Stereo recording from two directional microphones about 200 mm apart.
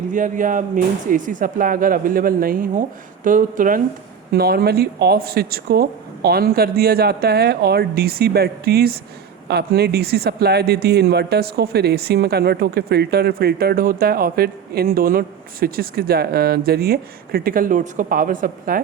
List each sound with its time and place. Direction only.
0.1 s speech: 40° right (ahead or behind)